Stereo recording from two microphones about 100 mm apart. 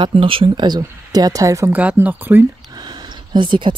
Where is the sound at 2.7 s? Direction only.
45° right (ahead or behind).